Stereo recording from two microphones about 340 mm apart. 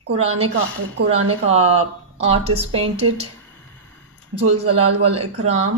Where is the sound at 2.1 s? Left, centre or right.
Centre.